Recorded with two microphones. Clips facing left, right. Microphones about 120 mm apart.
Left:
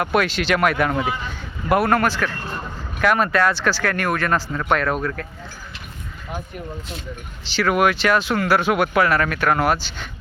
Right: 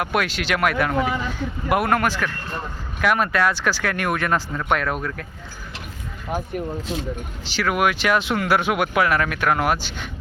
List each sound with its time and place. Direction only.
0.0 s speech: 5° right (ahead or behind)
6.3 s speech: 50° right (ahead or behind)
7.5 s speech: 10° right (ahead or behind)